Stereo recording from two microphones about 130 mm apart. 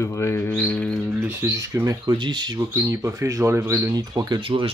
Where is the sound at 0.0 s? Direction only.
20° left (ahead or behind).